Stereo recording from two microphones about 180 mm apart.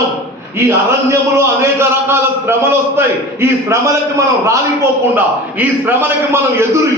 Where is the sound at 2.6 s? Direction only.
15° right (ahead or behind).